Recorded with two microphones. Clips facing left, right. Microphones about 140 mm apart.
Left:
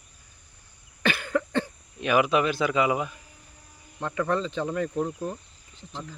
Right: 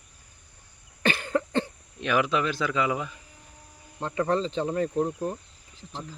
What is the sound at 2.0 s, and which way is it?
Speech, 10° left (ahead or behind).